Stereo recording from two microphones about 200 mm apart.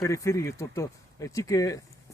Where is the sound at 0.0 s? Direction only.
15° left (ahead or behind).